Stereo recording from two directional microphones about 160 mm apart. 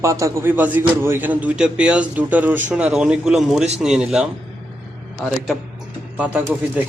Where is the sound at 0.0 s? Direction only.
20° right (ahead or behind).